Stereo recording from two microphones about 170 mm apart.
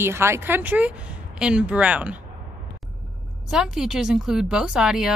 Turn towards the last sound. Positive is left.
turn(degrees=-5)  # may be behind; listen again after turning